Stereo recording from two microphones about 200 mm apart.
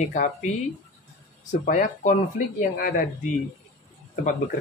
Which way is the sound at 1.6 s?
40° left (ahead or behind).